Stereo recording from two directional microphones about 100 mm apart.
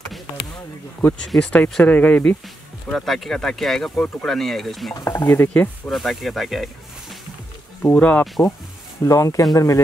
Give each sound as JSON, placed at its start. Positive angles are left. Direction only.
{"t": 1.2, "sound": "speech", "side_deg": 10}
{"t": 2.9, "sound": "speech", "side_deg": 0}
{"t": 4.9, "sound": "speech", "side_deg": 40}
{"t": 5.2, "sound": "stir", "side_deg": 25}
{"t": 5.9, "sound": "speech", "side_deg": 0}
{"t": 7.8, "sound": "speech", "side_deg": 15}
{"t": 9.0, "sound": "speech", "side_deg": 35}